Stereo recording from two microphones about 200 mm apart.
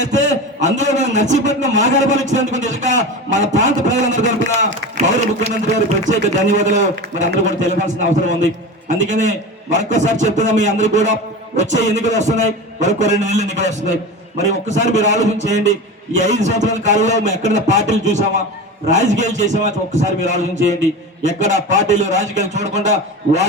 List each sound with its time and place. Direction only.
0.0 s a man's voice: 35° right (ahead or behind)